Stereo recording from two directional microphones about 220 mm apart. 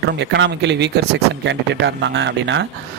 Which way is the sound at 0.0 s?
55° right (ahead or behind).